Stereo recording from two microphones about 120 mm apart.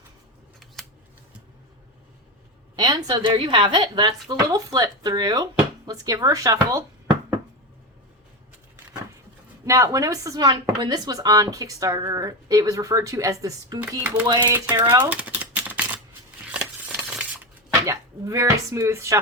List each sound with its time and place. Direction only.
2.7 s a woman's voice: 35° right (ahead or behind)
9.6 s a woman's voice: 25° right (ahead or behind)
14.9 s typewriter: 15° right (ahead or behind)
16.5 s a sound: 15° right (ahead or behind)
17.8 s speech: 25° right (ahead or behind)